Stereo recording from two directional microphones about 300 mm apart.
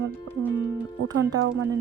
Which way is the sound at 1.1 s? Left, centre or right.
Centre.